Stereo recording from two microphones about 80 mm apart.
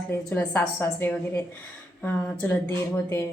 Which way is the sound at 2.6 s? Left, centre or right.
Left.